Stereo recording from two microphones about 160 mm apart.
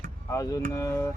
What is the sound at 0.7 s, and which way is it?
Speech, 20° left (ahead or behind).